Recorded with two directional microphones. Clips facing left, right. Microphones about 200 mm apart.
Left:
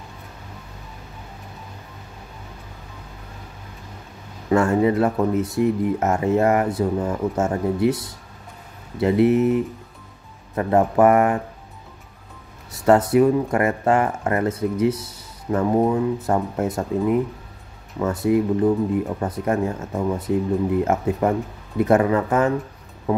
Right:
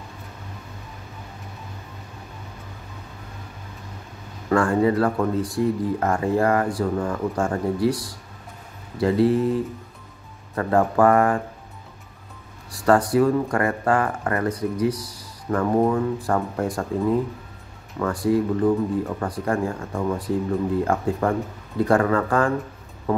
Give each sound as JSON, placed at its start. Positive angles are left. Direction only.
{"t": 4.5, "sound": "speech", "side_deg": 20}
{"t": 12.7, "sound": "speech", "side_deg": 25}
{"t": 23.1, "sound": "music", "side_deg": 15}